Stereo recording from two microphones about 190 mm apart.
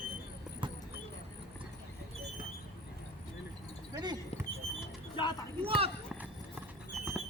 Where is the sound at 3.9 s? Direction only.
20° right (ahead or behind).